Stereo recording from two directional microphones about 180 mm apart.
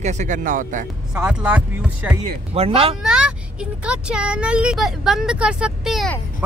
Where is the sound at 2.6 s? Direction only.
30° right (ahead or behind).